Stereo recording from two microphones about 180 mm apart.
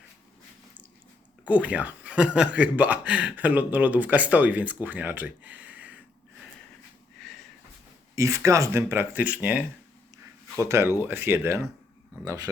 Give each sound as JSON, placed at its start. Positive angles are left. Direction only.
{"t": 1.5, "sound": "speech", "side_deg": -10}
{"t": 8.1, "sound": "speech", "side_deg": -15}